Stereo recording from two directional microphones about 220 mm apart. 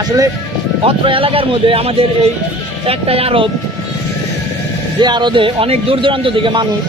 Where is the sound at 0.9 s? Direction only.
25° right (ahead or behind).